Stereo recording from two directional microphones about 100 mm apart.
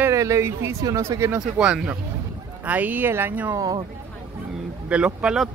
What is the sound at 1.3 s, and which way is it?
Speech, 10° right (ahead or behind).